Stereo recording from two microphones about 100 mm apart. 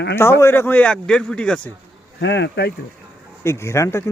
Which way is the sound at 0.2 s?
25° left (ahead or behind).